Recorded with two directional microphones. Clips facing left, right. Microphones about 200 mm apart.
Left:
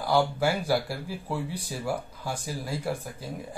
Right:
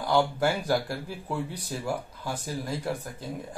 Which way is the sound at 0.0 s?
10° left (ahead or behind).